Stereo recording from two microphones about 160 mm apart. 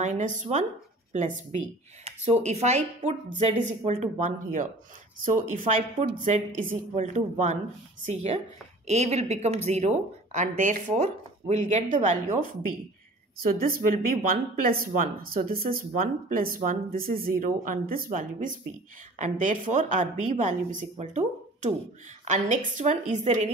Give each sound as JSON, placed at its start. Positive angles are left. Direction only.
{"t": 0.0, "sound": "a woman's voice", "side_deg": -50}
{"t": 13.7, "sound": "speech", "side_deg": -65}